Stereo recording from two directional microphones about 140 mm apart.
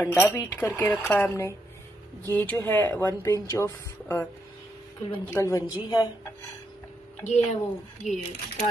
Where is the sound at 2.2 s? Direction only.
15° left (ahead or behind).